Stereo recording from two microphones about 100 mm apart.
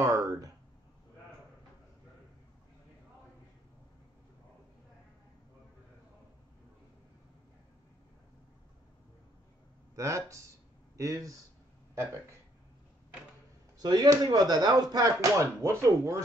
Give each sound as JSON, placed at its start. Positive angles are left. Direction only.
{"t": 0.0, "sound": "a sound", "side_deg": -30}
{"t": 9.9, "sound": "speech", "side_deg": -30}
{"t": 13.7, "sound": "speech", "side_deg": -40}